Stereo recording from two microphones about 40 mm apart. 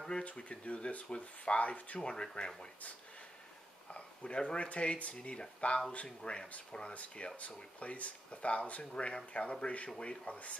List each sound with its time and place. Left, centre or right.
0.2 s speech: left
2.0 s speech: left
3.9 s speech: left
6.9 s speech: left